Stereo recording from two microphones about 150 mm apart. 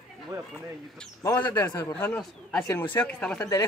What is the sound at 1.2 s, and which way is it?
Speech, 15° left (ahead or behind).